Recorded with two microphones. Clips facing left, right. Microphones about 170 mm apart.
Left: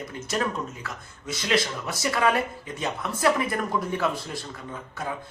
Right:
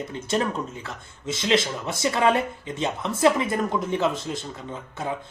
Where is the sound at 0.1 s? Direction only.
30° right (ahead or behind).